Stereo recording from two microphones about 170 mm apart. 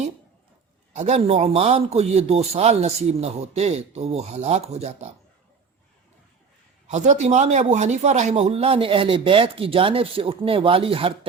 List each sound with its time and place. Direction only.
0.9 s a man's voice: 40° right (ahead or behind)
6.8 s a man's voice: 45° right (ahead or behind)